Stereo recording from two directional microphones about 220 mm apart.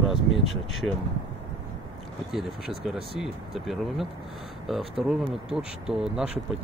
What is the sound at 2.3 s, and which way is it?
Speech, centre (ahead or behind).